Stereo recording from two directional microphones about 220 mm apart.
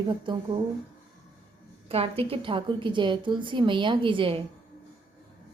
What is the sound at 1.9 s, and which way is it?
Speech, 25° right (ahead or behind).